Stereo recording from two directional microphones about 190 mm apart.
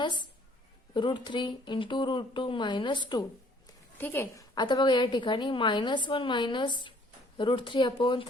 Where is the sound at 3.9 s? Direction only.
10° left (ahead or behind).